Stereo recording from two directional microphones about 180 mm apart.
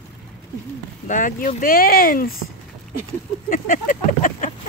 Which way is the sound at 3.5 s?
50° left (ahead or behind).